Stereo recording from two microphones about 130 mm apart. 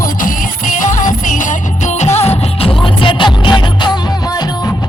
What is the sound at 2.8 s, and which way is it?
Music, 40° left (ahead or behind).